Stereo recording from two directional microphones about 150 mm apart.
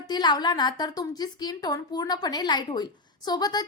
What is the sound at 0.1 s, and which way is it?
A woman's voice, 30° left (ahead or behind).